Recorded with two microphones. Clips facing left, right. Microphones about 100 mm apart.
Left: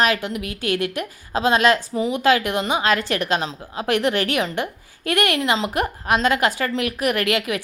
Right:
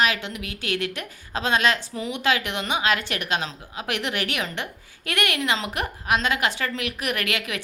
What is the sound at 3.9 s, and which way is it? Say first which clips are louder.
A woman's voice: left 8 dB; 45° left (ahead or behind).